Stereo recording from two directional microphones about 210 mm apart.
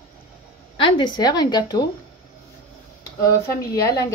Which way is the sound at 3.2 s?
15° left (ahead or behind).